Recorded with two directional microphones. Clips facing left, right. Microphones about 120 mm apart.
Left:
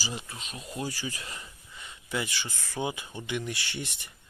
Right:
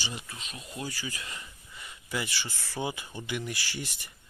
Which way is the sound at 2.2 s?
15° left (ahead or behind).